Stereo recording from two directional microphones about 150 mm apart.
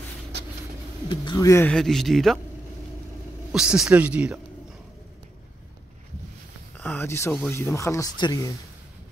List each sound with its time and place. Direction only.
1.1 s speech: 30° left (ahead or behind)
1.7 s a man's voice: 5° left (ahead or behind)
3.5 s speech: 5° right (ahead or behind)
6.8 s speech: 10° left (ahead or behind)